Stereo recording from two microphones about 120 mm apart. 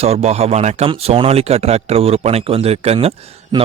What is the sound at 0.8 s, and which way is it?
Speech, 55° right (ahead or behind).